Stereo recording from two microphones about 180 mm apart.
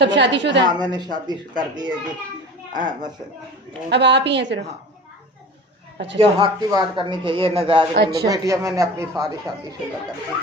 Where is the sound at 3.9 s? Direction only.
75° right (ahead or behind).